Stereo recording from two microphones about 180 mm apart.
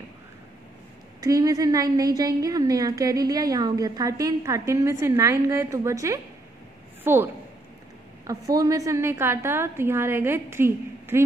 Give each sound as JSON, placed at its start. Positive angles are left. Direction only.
{"t": 1.2, "sound": "a woman's voice", "side_deg": -20}
{"t": 8.3, "sound": "a woman's voice", "side_deg": -20}